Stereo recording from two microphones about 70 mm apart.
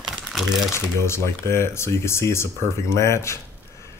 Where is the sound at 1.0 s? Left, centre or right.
Left.